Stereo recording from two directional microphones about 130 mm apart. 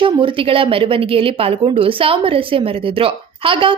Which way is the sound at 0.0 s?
40° right (ahead or behind).